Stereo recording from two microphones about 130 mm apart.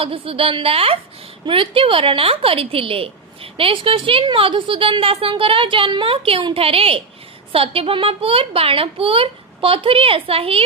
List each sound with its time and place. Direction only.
0.0 s a woman's voice: 45° right (ahead or behind)